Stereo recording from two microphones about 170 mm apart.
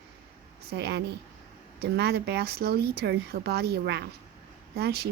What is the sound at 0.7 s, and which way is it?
Speech, 75° right (ahead or behind).